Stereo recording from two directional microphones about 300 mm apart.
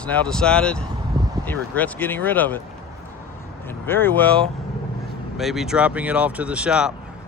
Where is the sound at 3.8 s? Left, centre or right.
Centre.